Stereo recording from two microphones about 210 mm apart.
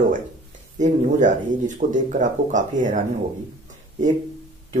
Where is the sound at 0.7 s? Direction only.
35° right (ahead or behind).